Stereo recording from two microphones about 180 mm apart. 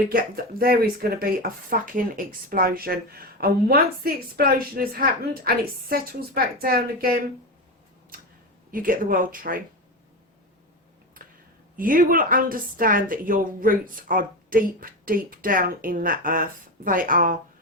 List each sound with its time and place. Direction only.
0.1 s speech: 55° right (ahead or behind)
8.1 s a sound: 55° right (ahead or behind)
8.7 s a woman's voice: 50° right (ahead or behind)
11.8 s a woman's voice: 50° right (ahead or behind)